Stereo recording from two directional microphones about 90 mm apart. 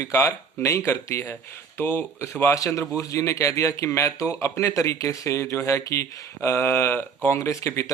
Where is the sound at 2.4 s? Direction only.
35° left (ahead or behind).